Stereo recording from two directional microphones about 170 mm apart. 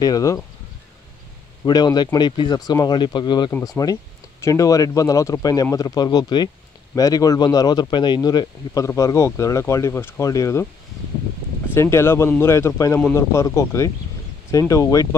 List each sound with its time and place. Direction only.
0.0 s speech: 20° left (ahead or behind)
1.6 s speech: 20° left (ahead or behind)
11.7 s speech: 15° left (ahead or behind)